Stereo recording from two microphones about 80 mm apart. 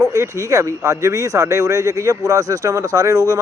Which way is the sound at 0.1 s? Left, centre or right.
Right.